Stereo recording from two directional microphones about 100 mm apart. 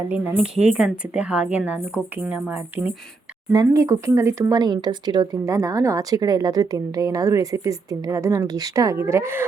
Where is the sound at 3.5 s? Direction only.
35° right (ahead or behind).